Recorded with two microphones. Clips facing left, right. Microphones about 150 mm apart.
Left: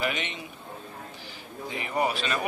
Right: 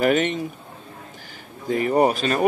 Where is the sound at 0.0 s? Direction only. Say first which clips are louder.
Right 12 dB; 45° right (ahead or behind).